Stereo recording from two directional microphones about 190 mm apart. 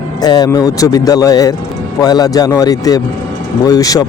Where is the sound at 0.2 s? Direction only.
20° left (ahead or behind).